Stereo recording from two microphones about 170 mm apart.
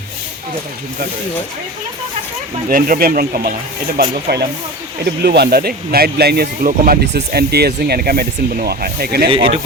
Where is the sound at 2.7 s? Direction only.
55° right (ahead or behind).